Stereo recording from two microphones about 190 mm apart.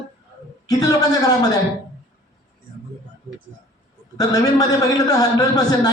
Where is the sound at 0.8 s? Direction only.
20° left (ahead or behind).